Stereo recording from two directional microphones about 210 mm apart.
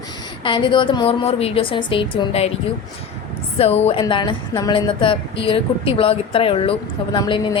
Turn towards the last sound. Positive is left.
turn(degrees=20)  # may be behind; listen again after turning